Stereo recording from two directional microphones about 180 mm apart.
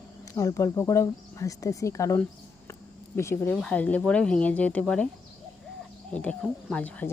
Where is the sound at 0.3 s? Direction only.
15° left (ahead or behind).